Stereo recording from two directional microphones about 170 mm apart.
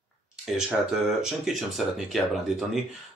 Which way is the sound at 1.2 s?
Centre (ahead or behind).